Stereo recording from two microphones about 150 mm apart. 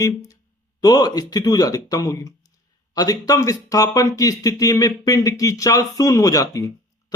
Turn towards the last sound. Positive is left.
turn(degrees=20)  # may be behind; listen again after turning